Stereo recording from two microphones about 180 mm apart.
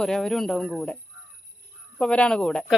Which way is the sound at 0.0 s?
Centre (ahead or behind).